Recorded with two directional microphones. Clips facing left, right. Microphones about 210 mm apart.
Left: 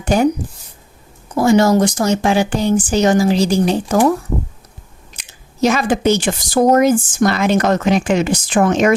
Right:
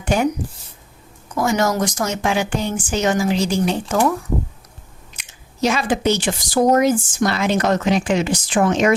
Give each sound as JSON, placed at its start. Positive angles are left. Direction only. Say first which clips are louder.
{"t": 0.0, "sound": "speech", "louder": "left 4 dB", "side_deg": 40}
{"t": 1.3, "sound": "speech", "louder": "left 7 dB", "side_deg": 30}
{"t": 5.5, "sound": "speech", "louder": "left 4 dB", "side_deg": 50}